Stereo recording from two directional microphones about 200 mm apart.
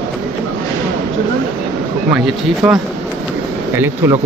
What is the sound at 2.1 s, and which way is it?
Speech, centre (ahead or behind).